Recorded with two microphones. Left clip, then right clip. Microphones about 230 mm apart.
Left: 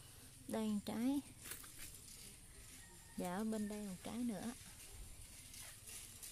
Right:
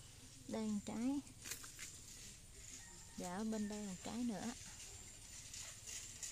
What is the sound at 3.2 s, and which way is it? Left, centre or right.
Speech, left.